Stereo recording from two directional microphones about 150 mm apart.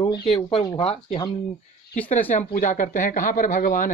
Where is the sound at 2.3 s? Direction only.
60° left (ahead or behind).